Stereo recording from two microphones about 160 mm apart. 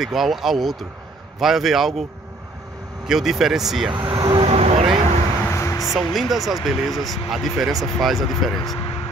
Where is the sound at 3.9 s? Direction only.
30° right (ahead or behind).